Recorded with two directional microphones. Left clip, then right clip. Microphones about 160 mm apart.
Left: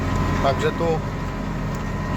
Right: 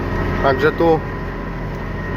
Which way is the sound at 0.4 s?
20° right (ahead or behind).